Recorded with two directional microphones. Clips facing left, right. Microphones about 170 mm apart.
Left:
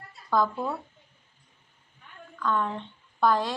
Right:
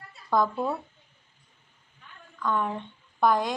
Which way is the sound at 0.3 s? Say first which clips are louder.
Even; 20° right (ahead or behind).